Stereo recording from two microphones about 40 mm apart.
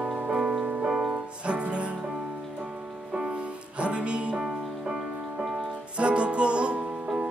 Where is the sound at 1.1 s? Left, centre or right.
Right.